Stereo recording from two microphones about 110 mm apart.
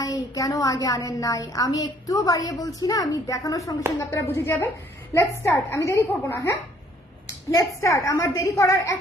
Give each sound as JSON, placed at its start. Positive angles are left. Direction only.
{"t": 0.0, "sound": "a woman's voice", "side_deg": 30}